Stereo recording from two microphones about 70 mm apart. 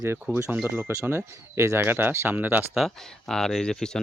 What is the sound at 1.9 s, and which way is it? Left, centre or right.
Speech, right.